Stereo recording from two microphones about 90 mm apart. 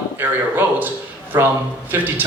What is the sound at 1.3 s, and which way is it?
Speech, 35° right (ahead or behind).